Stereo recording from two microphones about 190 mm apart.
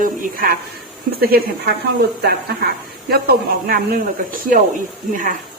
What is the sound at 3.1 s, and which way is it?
A woman's voice, 55° right (ahead or behind).